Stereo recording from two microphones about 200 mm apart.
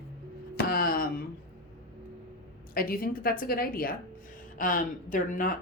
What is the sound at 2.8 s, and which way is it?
A woman's voice, 45° left (ahead or behind).